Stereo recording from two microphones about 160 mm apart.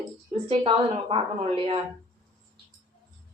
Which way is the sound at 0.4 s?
35° right (ahead or behind).